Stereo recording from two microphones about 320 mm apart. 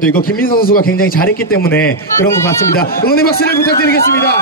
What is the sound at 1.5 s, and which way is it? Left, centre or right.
Speech, centre.